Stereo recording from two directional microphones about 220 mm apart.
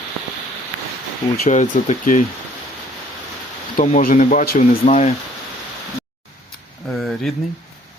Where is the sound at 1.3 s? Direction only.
35° left (ahead or behind).